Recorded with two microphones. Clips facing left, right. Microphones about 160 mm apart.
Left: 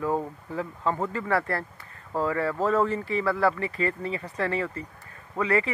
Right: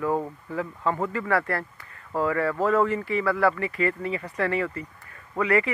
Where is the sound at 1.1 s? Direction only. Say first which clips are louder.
Right 1 dB; 25° left (ahead or behind).